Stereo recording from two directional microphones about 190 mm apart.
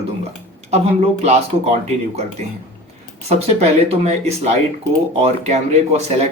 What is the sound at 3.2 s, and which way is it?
Speech, 35° right (ahead or behind).